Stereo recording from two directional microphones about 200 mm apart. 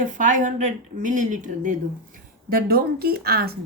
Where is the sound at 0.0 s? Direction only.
40° right (ahead or behind).